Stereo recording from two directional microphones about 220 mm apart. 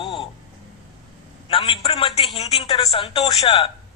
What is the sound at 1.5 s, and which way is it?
A man's voice, 25° left (ahead or behind).